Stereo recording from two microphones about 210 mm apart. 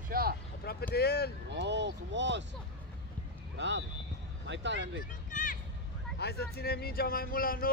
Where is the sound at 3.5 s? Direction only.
60° right (ahead or behind).